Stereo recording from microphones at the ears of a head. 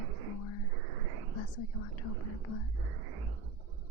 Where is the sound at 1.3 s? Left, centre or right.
Left.